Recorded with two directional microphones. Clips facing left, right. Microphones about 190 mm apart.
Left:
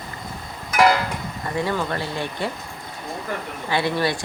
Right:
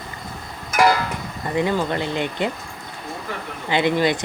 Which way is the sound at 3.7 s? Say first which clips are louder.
Right 3 dB; 20° right (ahead or behind).